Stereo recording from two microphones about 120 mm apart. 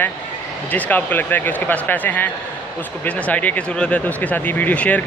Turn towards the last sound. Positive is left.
turn(degrees=10)  # may be behind; listen again after turning